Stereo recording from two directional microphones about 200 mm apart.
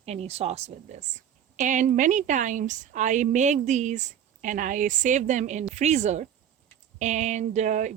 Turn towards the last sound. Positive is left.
turn(degrees=-35)  # may be behind; listen again after turning